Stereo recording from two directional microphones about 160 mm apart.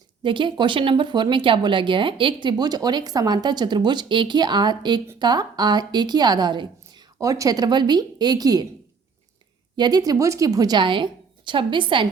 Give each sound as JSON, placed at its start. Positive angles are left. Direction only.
{"t": 0.2, "sound": "speech", "side_deg": -30}
{"t": 9.7, "sound": "speech", "side_deg": -25}